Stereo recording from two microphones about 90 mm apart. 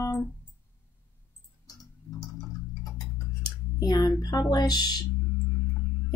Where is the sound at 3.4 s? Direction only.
45° left (ahead or behind).